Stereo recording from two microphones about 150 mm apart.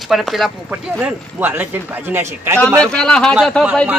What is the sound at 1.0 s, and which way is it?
Speech, 15° right (ahead or behind).